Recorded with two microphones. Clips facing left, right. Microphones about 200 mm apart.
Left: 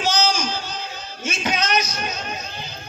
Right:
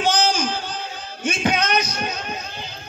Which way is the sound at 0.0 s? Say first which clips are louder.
Right 2 dB; 55° right (ahead or behind).